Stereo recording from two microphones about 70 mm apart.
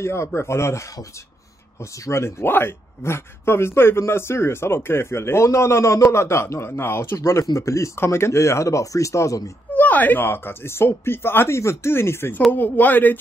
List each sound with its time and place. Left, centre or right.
0.0 s speech: left
9.8 s speech: left
12.5 s speech: left